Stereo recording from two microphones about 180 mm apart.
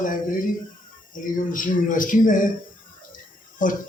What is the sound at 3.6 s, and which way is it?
Speech, 45° left (ahead or behind).